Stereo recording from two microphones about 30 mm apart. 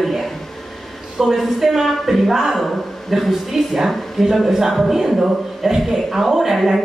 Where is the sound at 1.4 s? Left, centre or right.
Centre.